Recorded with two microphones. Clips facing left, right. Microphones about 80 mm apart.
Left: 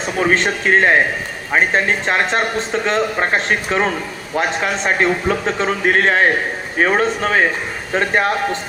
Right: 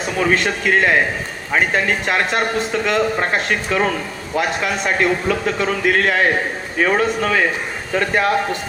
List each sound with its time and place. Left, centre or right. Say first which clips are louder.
0.2 s speech: left 1 dB; left